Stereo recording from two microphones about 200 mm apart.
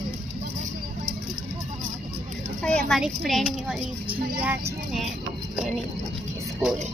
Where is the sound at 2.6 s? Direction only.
5° left (ahead or behind).